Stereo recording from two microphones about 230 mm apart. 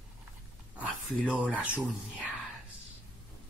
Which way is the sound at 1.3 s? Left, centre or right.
Centre.